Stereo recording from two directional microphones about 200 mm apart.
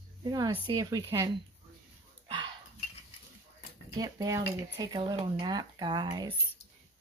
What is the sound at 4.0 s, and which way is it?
Speech, 15° right (ahead or behind).